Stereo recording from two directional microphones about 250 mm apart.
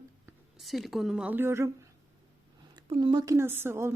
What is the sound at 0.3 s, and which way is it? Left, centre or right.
Speech, centre.